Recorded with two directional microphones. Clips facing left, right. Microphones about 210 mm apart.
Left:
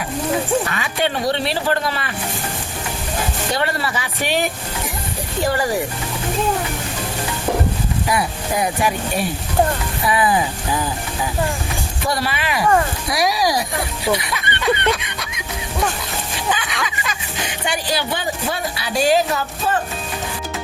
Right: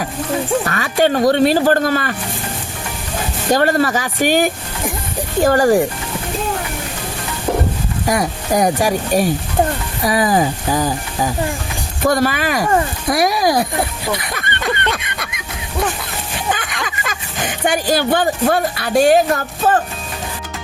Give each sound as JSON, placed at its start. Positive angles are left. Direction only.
{"t": 0.7, "sound": "speech", "side_deg": -45}
{"t": 3.5, "sound": "speech", "side_deg": -45}
{"t": 8.0, "sound": "speech", "side_deg": -45}
{"t": 16.8, "sound": "speech", "side_deg": -45}